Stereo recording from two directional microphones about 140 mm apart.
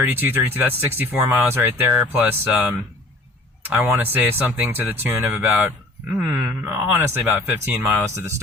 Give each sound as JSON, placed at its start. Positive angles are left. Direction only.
{"t": 0.1, "sound": "speech", "side_deg": -15}